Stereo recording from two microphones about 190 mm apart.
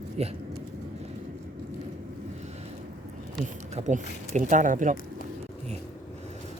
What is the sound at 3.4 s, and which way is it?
Speech, 40° right (ahead or behind).